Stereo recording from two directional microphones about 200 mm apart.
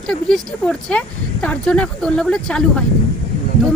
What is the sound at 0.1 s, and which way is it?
Speech, 5° left (ahead or behind).